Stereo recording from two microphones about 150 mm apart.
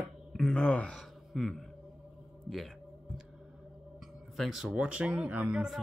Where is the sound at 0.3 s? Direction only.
5° left (ahead or behind).